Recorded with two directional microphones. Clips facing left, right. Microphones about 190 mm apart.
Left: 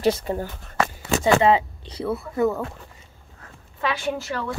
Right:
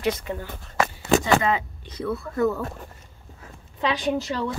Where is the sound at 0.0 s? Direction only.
35° left (ahead or behind).